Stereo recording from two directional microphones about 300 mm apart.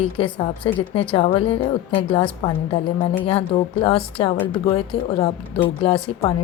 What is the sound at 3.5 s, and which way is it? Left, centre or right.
A woman's voice, centre.